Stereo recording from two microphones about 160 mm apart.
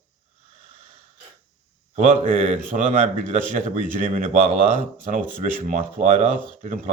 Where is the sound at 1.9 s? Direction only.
50° right (ahead or behind).